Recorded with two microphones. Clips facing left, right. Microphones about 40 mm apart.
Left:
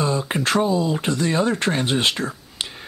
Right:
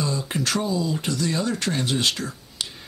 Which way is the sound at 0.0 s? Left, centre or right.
Left.